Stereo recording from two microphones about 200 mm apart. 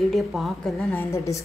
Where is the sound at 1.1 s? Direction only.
15° left (ahead or behind).